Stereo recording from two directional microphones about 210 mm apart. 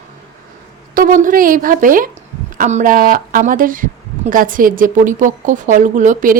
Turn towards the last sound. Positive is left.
turn(degrees=-40)  # may be behind; listen again after turning